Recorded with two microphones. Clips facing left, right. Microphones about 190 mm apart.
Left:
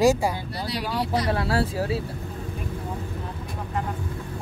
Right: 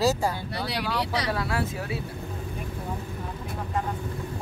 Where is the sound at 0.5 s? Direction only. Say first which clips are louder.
Left 1 dB; 70° right (ahead or behind).